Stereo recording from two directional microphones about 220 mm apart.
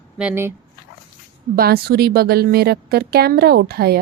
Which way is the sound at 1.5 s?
45° right (ahead or behind).